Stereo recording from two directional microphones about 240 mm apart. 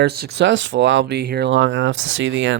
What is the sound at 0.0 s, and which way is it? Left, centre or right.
Speech, right.